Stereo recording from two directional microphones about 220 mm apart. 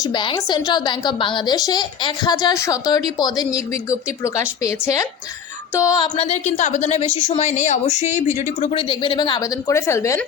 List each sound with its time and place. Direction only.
0.0 s a woman's voice: 20° left (ahead or behind)
6.1 s a woman's voice: 30° left (ahead or behind); by 10.2 s 15° left (ahead or behind)